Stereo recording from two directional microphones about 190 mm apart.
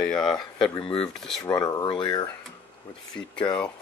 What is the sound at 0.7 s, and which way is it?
Speech, 30° left (ahead or behind).